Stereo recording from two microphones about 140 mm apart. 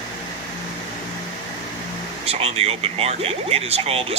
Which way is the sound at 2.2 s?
45° right (ahead or behind).